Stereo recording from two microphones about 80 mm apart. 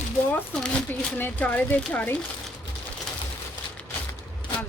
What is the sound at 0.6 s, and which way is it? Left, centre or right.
A woman's voice, centre.